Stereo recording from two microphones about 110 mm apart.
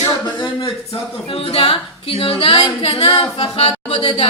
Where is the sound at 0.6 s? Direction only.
60° left (ahead or behind).